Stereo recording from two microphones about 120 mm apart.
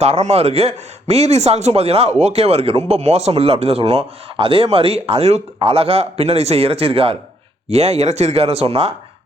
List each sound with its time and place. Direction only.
0.0 s a man's voice: 65° right (ahead or behind)